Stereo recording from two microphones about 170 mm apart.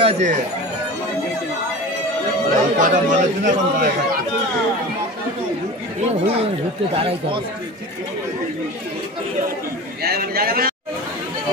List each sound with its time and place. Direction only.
0.0 s speech: 40° right (ahead or behind)
2.5 s a man's voice: 50° right (ahead or behind)
6.0 s speech: 35° right (ahead or behind)
10.0 s a man's voice: 65° right (ahead or behind)